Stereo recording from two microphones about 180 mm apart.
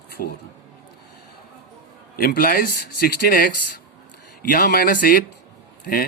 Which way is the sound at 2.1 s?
55° left (ahead or behind).